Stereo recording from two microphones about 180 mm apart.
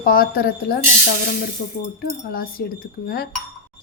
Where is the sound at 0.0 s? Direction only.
55° left (ahead or behind).